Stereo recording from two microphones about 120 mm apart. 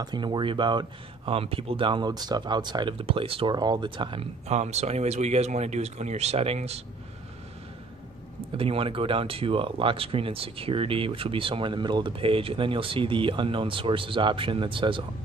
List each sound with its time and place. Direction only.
0.0 s speech: 40° right (ahead or behind)
3.5 s speech: 35° right (ahead or behind)
4.5 s speech: 65° right (ahead or behind)
8.5 s speech: 50° right (ahead or behind)